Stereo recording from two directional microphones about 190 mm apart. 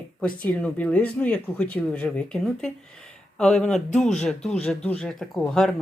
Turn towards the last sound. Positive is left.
turn(degrees=0)  # may be behind; listen again after turning